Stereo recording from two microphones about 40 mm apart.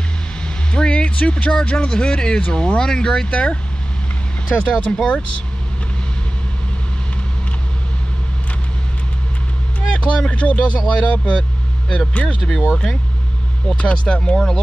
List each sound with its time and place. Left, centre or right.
0.7 s speech: left
3.3 s speech: left
4.6 s speech: left
9.8 s speech: left
14.3 s speech: centre